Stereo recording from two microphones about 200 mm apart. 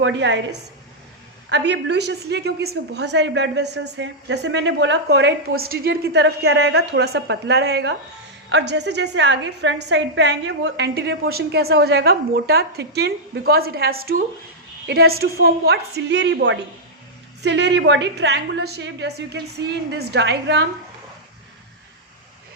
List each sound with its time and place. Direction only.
0.0 s a woman's voice: 65° right (ahead or behind)